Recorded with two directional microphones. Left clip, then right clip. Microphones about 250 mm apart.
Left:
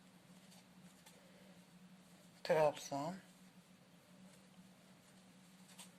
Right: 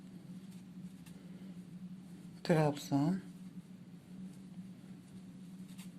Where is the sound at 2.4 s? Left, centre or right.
Centre.